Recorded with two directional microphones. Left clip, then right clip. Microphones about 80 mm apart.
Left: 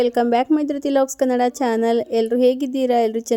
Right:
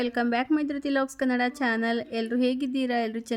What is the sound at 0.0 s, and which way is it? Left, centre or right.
A woman's voice, left.